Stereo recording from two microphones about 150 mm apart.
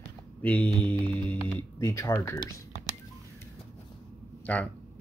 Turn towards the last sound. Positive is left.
turn(degrees=10)  # may be behind; listen again after turning